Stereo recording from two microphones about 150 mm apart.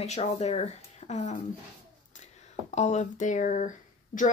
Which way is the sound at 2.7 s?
50° left (ahead or behind).